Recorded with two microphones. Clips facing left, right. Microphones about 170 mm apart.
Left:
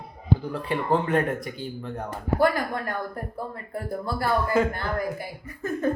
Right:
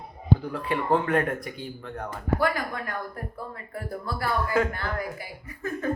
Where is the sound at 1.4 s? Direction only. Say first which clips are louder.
Left 3 dB; centre (ahead or behind).